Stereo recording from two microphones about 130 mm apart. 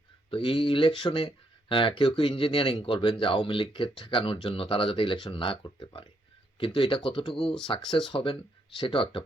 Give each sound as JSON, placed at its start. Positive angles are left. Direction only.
{"t": 0.3, "sound": "speech", "side_deg": 40}
{"t": 7.3, "sound": "speech", "side_deg": 5}
{"t": 7.7, "sound": "speech", "side_deg": 35}